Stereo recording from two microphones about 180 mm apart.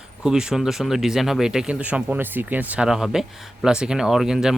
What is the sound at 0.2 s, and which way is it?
Speech, 5° right (ahead or behind).